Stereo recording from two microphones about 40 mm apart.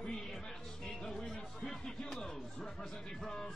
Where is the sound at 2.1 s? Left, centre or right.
Centre.